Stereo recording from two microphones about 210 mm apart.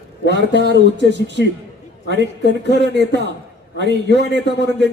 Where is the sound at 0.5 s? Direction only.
55° left (ahead or behind).